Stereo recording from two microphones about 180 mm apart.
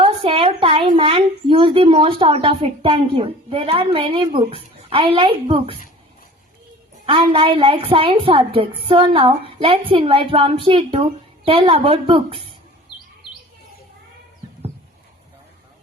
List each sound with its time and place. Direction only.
0.0 s a sound: 30° right (ahead or behind)
0.9 s a woman's voice: 30° right (ahead or behind)
7.0 s a woman's voice: 30° right (ahead or behind)